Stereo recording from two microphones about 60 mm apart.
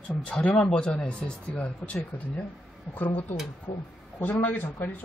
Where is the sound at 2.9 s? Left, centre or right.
Left.